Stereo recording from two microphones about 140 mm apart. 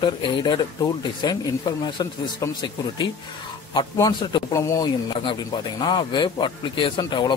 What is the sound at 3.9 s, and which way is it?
A man's voice, 30° left (ahead or behind).